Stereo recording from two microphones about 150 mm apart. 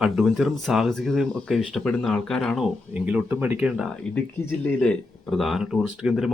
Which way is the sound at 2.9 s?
10° right (ahead or behind).